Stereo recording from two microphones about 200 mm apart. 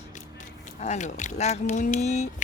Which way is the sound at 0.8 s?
35° left (ahead or behind).